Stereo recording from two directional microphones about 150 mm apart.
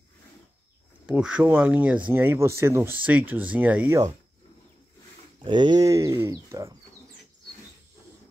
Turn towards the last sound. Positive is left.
turn(degrees=-20)  # may be behind; listen again after turning